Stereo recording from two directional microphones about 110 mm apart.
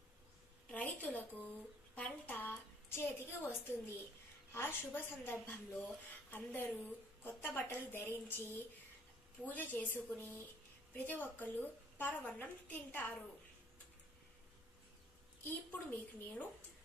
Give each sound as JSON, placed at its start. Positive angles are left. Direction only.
{"t": 0.7, "sound": "a woman's voice", "side_deg": 15}
{"t": 15.4, "sound": "a woman's voice", "side_deg": 15}